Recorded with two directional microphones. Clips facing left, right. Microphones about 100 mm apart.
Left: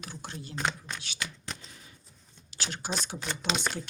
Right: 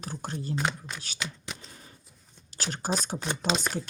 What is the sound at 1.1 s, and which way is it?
Shuffling cards, 20° right (ahead or behind).